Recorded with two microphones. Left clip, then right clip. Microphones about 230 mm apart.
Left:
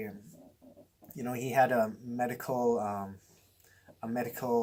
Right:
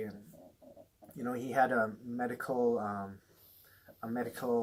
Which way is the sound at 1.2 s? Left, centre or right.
Left.